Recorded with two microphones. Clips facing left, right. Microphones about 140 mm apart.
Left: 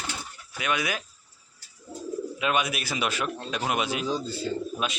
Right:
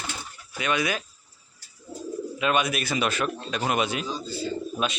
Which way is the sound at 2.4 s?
5° left (ahead or behind).